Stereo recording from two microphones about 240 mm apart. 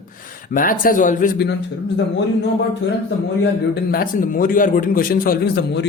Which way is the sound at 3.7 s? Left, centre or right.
Left.